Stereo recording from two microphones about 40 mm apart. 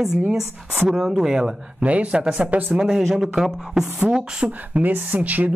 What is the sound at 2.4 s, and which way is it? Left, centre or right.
Speech, right.